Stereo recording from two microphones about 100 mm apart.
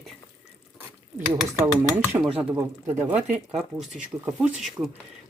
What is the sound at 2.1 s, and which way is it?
Speech, 45° right (ahead or behind).